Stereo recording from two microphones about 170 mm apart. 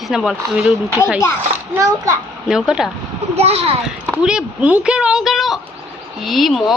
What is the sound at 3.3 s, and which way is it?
Speech, 35° right (ahead or behind).